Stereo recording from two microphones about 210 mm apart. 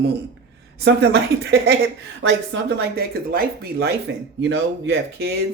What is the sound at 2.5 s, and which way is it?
Speech, 60° right (ahead or behind).